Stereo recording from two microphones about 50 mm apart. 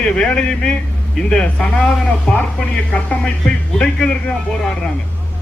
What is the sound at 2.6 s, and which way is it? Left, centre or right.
Speech, left.